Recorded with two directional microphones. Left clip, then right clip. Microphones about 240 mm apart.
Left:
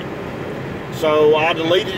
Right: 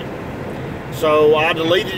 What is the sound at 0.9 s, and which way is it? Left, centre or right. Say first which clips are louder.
Speech: right 1 dB; centre.